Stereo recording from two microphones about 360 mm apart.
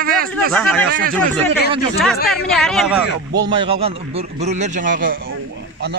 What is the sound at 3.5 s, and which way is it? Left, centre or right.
A man's voice, centre.